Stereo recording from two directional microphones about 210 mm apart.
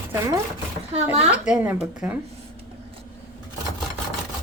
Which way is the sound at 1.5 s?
5° right (ahead or behind).